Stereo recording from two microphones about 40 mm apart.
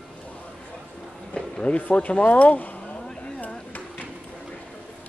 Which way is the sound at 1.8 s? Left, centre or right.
Left.